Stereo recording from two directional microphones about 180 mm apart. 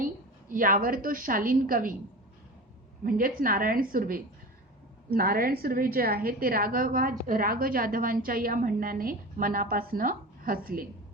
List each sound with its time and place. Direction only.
0.0 s a woman's voice: 50° right (ahead or behind)
3.0 s a woman's voice: 50° right (ahead or behind)